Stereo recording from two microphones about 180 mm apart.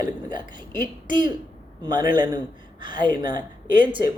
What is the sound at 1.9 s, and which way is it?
Speech, 25° right (ahead or behind).